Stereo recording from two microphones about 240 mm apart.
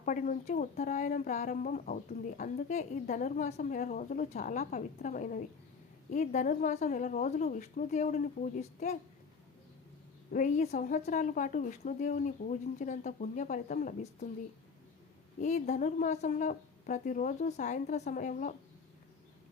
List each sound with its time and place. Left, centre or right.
0.0 s speech: left
10.3 s speech: left
15.4 s speech: left